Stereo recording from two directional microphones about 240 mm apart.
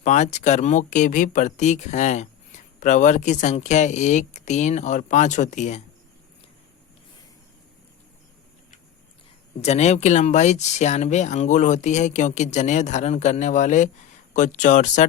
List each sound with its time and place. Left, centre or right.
0.0 s speech: left
9.6 s speech: left